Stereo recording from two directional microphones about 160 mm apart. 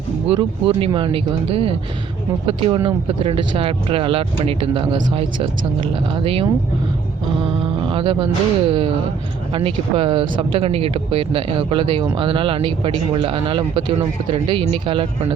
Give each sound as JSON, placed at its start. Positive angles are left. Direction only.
{"t": 0.3, "sound": "speech", "side_deg": -30}
{"t": 7.9, "sound": "speech", "side_deg": -30}